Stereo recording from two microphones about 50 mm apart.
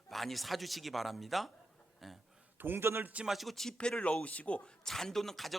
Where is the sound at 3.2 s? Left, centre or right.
Centre.